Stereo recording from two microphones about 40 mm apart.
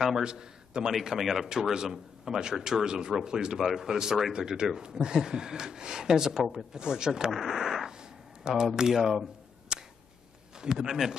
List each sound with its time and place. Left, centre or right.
0.2 s a man's voice: centre
1.2 s speech: centre
1.5 s speech: centre
8.0 s a sound: centre
8.7 s speech: centre
9.7 s a sound: centre
10.6 s speech: centre